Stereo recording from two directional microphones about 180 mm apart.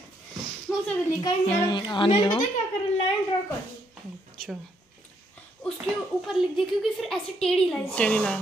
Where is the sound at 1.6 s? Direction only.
25° left (ahead or behind).